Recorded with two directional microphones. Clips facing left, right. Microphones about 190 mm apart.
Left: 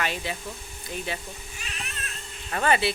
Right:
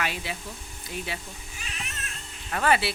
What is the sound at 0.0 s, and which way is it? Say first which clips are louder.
Speech: left 2 dB; 10° right (ahead or behind).